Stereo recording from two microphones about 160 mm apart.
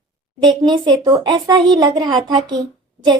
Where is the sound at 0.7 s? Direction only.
25° right (ahead or behind).